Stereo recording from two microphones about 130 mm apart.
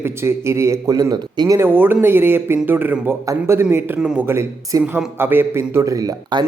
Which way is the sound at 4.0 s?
5° right (ahead or behind).